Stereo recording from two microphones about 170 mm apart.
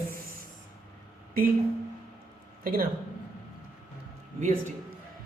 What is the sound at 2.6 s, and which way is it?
Speech, 60° right (ahead or behind).